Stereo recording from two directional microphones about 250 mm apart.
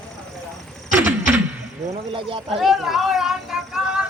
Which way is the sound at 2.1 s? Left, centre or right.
Right.